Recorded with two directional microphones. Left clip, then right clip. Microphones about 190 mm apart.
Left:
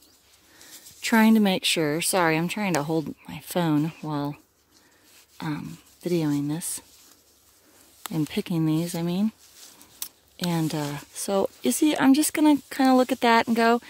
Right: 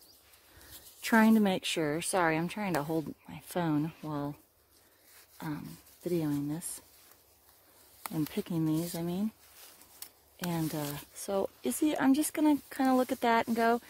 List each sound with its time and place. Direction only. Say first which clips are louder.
1.0 s speech: left 5 dB; 25° left (ahead or behind)
5.4 s speech: left 8 dB; 40° left (ahead or behind)
8.3 s speech: left 7 dB; 35° left (ahead or behind)
10.0 s a sound: left 13 dB; 40° left (ahead or behind)
10.5 s speech: left 7 dB; 40° left (ahead or behind)